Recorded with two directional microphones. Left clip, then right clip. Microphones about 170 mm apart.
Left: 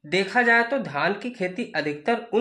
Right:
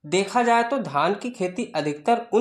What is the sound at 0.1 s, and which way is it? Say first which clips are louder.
Speech: even; 35° right (ahead or behind).